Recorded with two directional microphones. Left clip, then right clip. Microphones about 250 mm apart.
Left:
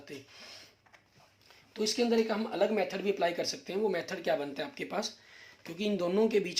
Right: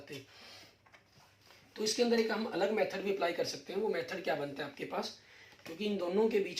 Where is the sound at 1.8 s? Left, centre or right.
Left.